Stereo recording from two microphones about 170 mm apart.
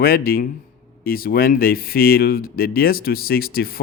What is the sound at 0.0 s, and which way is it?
Speech, 60° left (ahead or behind).